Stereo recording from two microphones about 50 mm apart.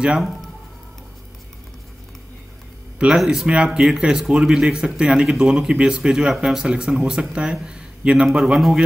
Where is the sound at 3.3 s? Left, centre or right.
Centre.